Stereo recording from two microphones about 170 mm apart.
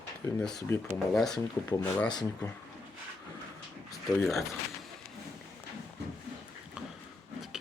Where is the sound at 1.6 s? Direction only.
15° left (ahead or behind).